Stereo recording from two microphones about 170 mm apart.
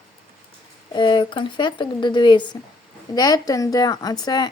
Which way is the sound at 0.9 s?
30° left (ahead or behind).